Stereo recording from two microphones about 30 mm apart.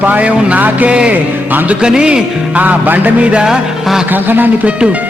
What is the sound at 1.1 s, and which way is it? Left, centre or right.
Speech, right.